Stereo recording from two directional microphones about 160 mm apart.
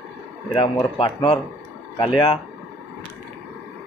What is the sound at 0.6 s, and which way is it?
Speech, 35° left (ahead or behind).